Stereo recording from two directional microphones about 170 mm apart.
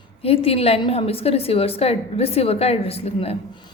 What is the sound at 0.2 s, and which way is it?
A woman's voice, 35° left (ahead or behind).